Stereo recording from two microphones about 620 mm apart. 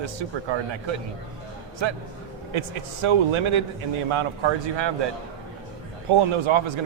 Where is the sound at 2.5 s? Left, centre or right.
Right.